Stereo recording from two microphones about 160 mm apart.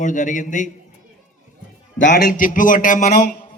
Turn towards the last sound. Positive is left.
turn(degrees=55)  # may be behind; listen again after turning